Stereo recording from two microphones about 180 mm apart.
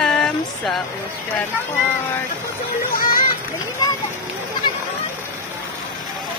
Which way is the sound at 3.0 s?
50° left (ahead or behind).